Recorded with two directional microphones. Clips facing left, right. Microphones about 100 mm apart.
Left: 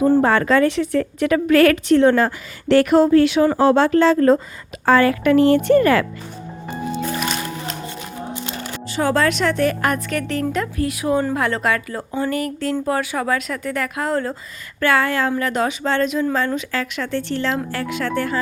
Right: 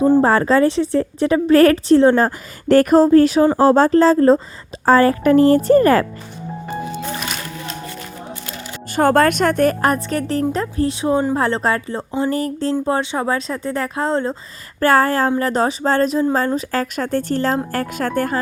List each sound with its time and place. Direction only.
0.2 s a woman's voice: 35° right (ahead or behind)
8.9 s a woman's voice: 50° right (ahead or behind); by 14.3 s 25° right (ahead or behind)
14.8 s a woman's voice: 40° right (ahead or behind)